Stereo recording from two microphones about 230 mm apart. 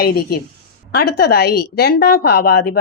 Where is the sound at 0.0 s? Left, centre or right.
Left.